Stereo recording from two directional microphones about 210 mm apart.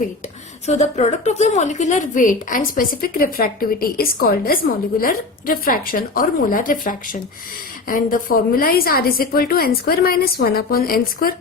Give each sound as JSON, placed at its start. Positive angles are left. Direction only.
{"t": 0.6, "sound": "a woman's voice", "side_deg": 30}